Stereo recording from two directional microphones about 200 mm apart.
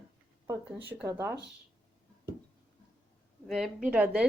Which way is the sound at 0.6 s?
10° right (ahead or behind).